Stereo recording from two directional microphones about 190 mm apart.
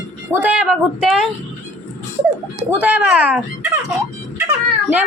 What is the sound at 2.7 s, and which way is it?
Speech, 10° right (ahead or behind).